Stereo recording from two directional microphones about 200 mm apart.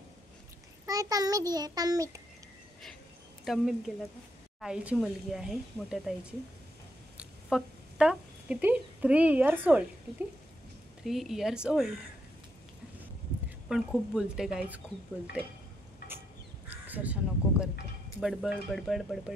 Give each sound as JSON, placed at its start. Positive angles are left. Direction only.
{"t": 0.8, "sound": "a child's voice", "side_deg": -15}
{"t": 3.4, "sound": "speech", "side_deg": 0}
{"t": 7.2, "sound": "speech", "side_deg": -5}
{"t": 11.1, "sound": "speech", "side_deg": 0}
{"t": 13.7, "sound": "speech", "side_deg": -5}
{"t": 16.6, "sound": "speech", "side_deg": -10}